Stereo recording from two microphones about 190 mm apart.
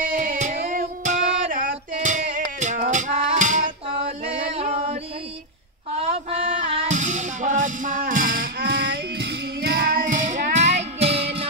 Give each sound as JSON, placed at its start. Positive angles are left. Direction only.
{"t": 0.0, "sound": "music", "side_deg": -45}
{"t": 6.0, "sound": "music", "side_deg": -30}
{"t": 8.6, "sound": "child singing", "side_deg": -70}